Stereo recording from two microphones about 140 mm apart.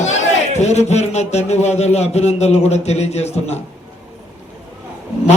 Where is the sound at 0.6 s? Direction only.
55° left (ahead or behind).